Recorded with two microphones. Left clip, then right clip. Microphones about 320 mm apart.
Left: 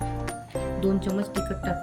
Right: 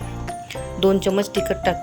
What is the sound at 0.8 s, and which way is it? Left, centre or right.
Speech, centre.